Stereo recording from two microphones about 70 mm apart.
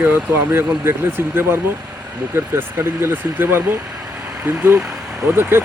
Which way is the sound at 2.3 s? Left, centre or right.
Right.